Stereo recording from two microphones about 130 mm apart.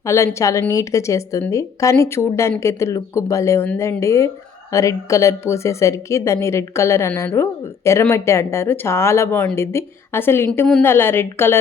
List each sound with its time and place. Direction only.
0.0 s a woman's voice: 20° left (ahead or behind)